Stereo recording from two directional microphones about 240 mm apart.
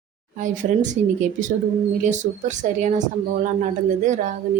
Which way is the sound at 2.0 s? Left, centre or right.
Right.